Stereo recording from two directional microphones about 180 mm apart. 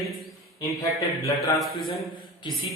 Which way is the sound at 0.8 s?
20° left (ahead or behind).